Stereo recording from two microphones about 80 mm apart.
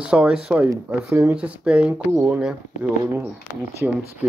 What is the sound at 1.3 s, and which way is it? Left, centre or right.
Speech, centre.